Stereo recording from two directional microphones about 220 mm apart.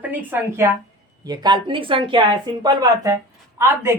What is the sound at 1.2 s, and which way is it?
A woman's voice, 20° right (ahead or behind).